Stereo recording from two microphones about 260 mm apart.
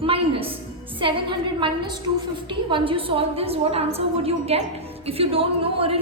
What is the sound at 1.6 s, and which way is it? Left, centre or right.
A woman's voice, centre.